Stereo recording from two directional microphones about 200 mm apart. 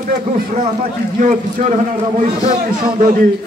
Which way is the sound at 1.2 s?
40° right (ahead or behind).